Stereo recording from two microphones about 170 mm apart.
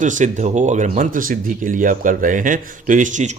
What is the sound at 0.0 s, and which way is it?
Speech, 45° right (ahead or behind).